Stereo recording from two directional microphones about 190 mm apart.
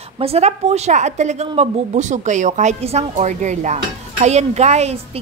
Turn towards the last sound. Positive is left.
turn(degrees=-35)  # may be behind; listen again after turning